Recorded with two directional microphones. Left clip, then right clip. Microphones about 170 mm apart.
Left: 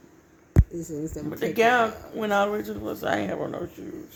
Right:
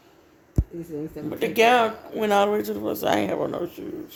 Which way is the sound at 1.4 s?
50° right (ahead or behind).